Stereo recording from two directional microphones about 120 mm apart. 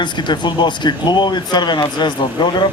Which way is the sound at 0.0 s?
40° left (ahead or behind).